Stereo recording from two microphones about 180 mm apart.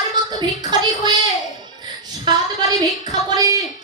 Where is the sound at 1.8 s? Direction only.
25° right (ahead or behind).